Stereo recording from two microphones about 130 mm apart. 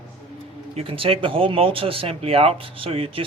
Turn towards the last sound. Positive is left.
turn(degrees=-45)  # may be behind; listen again after turning